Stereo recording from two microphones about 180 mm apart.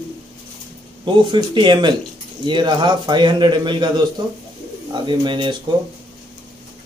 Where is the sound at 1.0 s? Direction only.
25° right (ahead or behind).